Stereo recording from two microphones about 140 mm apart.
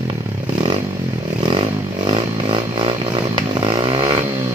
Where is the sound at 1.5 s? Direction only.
35° right (ahead or behind).